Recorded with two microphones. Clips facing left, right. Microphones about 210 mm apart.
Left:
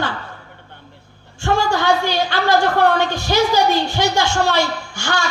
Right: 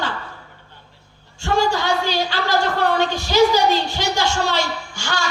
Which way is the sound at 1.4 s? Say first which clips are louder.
Left 1 dB; 55° left (ahead or behind).